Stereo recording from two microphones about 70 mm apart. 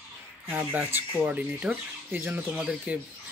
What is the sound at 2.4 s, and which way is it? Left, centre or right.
Speech, centre.